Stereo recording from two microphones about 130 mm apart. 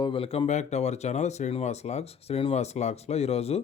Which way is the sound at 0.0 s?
45° left (ahead or behind).